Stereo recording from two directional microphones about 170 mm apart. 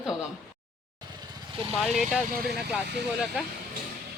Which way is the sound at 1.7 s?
Centre (ahead or behind).